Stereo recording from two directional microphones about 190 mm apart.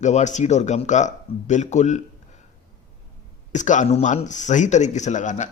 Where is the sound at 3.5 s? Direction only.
40° left (ahead or behind).